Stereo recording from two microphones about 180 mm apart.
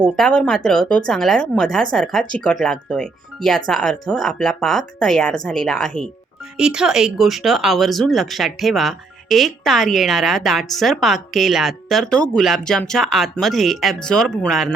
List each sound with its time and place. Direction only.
0.0 s speech: 5° left (ahead or behind)